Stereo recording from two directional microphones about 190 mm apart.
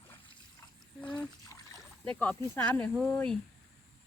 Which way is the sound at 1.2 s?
20° left (ahead or behind).